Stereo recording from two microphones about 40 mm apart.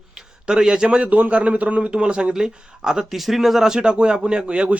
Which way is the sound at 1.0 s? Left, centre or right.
Right.